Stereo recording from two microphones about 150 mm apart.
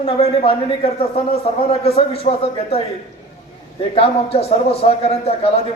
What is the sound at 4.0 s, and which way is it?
A man's voice, 40° left (ahead or behind).